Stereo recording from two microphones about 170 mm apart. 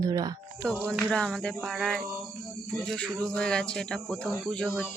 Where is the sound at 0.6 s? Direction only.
5° right (ahead or behind).